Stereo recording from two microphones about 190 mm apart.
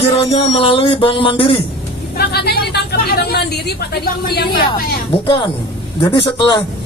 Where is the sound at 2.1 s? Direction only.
55° left (ahead or behind).